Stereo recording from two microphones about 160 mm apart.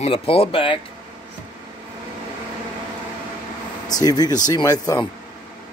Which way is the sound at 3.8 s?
25° left (ahead or behind).